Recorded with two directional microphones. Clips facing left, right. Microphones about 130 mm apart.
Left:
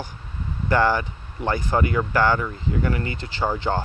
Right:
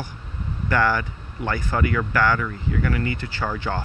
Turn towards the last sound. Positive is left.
turn(degrees=25)  # may be behind; listen again after turning